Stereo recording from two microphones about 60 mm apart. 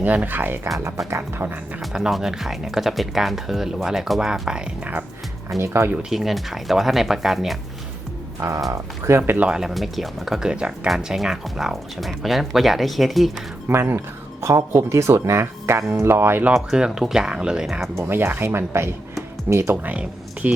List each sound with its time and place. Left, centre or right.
0.0 s speech: right
0.8 s speech: right
1.9 s speech: centre
5.5 s speech: right
6.0 s speech: centre
8.4 s speech: right
8.7 s speech: right
9.5 s speech: centre
13.7 s speech: right
16.7 s speech: centre
18.1 s speech: right
19.7 s speech: right